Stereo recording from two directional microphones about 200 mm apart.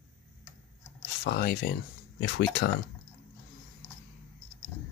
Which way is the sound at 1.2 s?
50° left (ahead or behind).